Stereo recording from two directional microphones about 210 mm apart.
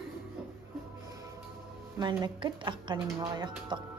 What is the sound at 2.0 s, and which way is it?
Speech, 20° right (ahead or behind).